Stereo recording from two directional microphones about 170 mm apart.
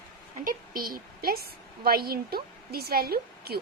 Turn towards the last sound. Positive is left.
turn(degrees=-65)  # may be behind; listen again after turning